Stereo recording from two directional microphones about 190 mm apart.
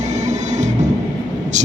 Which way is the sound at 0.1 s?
40° right (ahead or behind).